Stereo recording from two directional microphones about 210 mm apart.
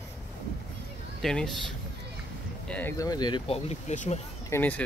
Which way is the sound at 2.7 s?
10° left (ahead or behind).